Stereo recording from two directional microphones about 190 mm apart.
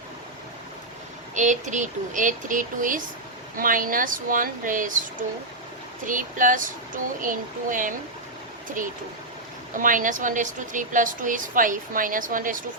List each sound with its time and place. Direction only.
1.4 s a woman's voice: 40° right (ahead or behind)
6.1 s a woman's voice: 45° right (ahead or behind)